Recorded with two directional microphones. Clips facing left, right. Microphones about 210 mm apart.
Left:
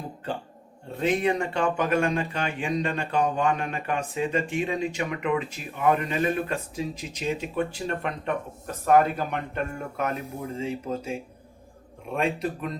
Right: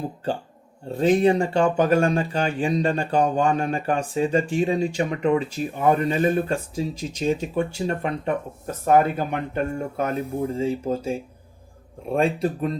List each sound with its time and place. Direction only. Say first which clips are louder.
0.9 s speech: right 6 dB; 30° right (ahead or behind)